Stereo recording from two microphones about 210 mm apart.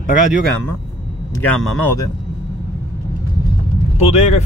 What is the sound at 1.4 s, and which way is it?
Speech, 10° left (ahead or behind).